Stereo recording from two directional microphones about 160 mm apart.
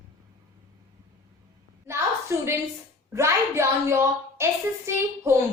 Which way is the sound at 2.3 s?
15° right (ahead or behind).